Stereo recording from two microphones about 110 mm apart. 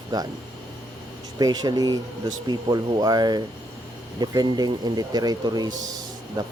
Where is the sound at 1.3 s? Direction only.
35° right (ahead or behind).